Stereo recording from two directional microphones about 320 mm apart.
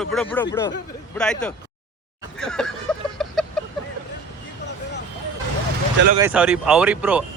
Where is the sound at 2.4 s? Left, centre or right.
Centre.